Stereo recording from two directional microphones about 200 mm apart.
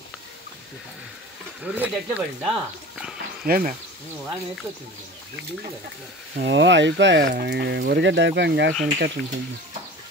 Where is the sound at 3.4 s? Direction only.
45° right (ahead or behind).